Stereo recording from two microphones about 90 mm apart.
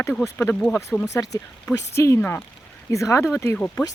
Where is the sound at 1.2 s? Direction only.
40° left (ahead or behind).